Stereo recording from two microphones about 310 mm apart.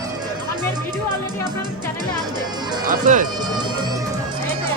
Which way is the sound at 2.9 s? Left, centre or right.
Right.